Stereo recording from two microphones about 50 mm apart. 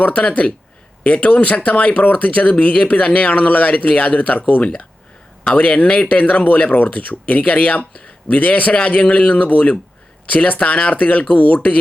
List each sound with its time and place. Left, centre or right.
0.0 s speech: left